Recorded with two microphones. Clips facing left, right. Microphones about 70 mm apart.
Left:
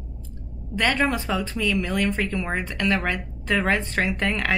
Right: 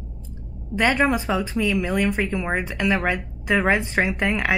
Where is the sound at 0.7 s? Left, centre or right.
Centre.